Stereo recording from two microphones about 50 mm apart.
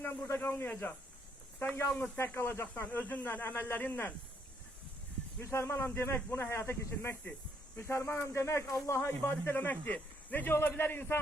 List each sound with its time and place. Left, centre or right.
0.0 s a man's voice: left
5.4 s speech: left
9.0 s a man's voice: left